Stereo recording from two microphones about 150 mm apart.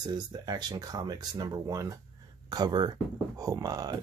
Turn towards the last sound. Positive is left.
turn(degrees=-25)  # may be behind; listen again after turning